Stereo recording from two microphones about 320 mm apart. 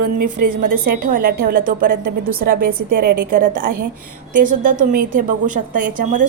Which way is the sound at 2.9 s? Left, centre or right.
Right.